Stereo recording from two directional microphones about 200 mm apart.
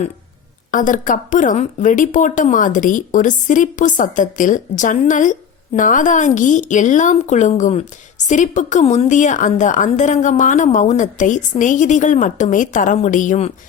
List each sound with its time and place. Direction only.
0.7 s a woman's voice: 40° left (ahead or behind)